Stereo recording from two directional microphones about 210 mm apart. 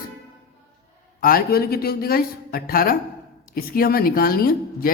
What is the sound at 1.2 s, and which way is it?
Speech, 45° left (ahead or behind).